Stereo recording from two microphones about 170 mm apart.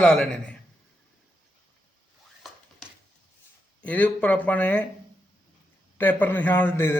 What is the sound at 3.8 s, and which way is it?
A man's voice, 10° left (ahead or behind).